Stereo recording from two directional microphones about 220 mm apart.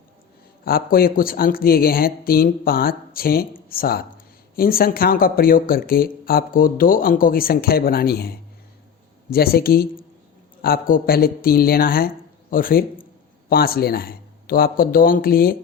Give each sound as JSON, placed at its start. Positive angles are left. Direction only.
{"t": 0.6, "sound": "speech", "side_deg": 40}